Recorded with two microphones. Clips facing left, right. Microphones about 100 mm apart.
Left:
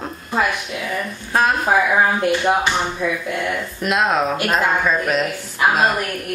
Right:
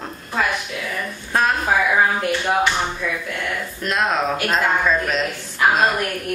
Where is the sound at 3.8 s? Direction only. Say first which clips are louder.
Left 3 dB; 10° left (ahead or behind).